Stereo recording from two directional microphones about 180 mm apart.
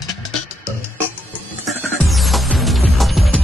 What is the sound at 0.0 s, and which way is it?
Music, centre (ahead or behind).